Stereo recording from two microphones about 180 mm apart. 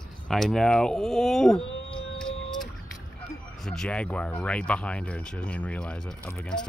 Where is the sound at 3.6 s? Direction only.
5° left (ahead or behind).